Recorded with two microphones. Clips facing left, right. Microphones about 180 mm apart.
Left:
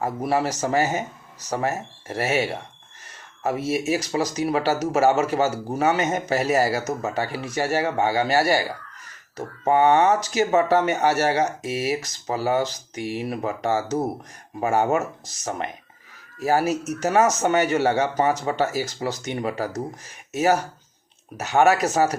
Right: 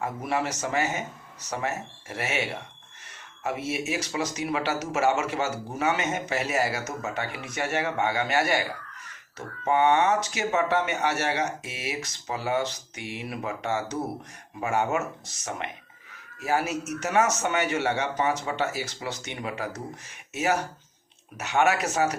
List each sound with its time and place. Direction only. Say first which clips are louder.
0.0 s speech: left 5 dB; 35° left (ahead or behind)
9.6 s speech: left 4 dB; 40° left (ahead or behind)